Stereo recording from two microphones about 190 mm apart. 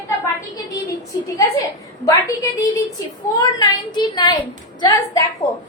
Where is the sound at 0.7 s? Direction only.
15° left (ahead or behind).